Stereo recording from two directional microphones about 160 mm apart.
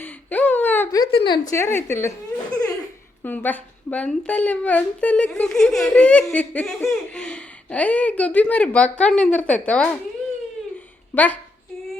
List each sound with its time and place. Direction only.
0.0 s whimper: 10° left (ahead or behind)
0.9 s a woman's voice: 25° left (ahead or behind)
3.2 s speech: 10° left (ahead or behind)
11.1 s a woman's voice: 10° left (ahead or behind)